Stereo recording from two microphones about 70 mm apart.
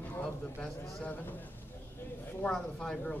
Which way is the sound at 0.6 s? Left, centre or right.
Centre.